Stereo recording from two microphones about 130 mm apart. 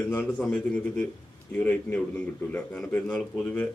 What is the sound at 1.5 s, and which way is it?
A man's voice, 15° left (ahead or behind).